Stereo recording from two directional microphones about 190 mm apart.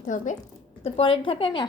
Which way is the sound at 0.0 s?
40° left (ahead or behind).